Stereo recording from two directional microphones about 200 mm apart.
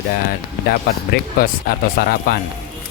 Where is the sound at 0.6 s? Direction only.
45° left (ahead or behind).